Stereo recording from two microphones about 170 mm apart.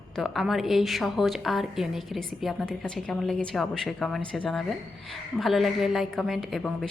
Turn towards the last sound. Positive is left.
turn(degrees=0)  # may be behind; listen again after turning